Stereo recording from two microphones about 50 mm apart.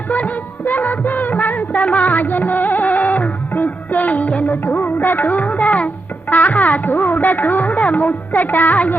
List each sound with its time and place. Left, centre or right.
0.1 s music: left
4.6 s speech: left